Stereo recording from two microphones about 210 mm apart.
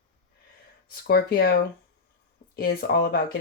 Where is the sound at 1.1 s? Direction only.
50° left (ahead or behind).